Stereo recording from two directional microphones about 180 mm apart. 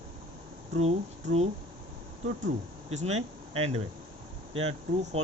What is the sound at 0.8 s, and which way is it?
Speech, 35° right (ahead or behind).